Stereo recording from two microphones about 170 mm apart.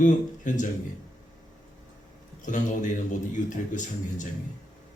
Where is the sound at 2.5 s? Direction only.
50° left (ahead or behind).